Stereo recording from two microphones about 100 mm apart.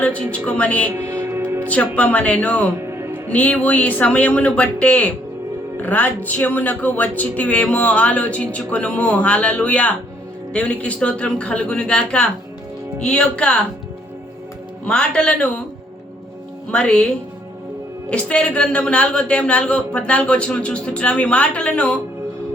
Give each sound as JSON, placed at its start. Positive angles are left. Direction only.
{"t": 0.0, "sound": "speech", "side_deg": 15}
{"t": 0.9, "sound": "music", "side_deg": -25}
{"t": 1.6, "sound": "a woman's voice", "side_deg": 15}
{"t": 2.8, "sound": "music", "side_deg": -25}
{"t": 3.2, "sound": "speech", "side_deg": 15}
{"t": 14.8, "sound": "speech", "side_deg": 10}
{"t": 16.7, "sound": "speech", "side_deg": 10}
{"t": 18.1, "sound": "speech", "side_deg": 10}